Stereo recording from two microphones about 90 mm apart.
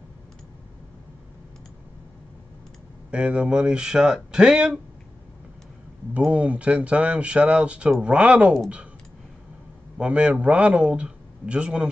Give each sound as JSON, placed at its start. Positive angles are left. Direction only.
{"t": 3.1, "sound": "a man's voice", "side_deg": -15}
{"t": 6.2, "sound": "a man's voice", "side_deg": -15}
{"t": 9.9, "sound": "a man's voice", "side_deg": -15}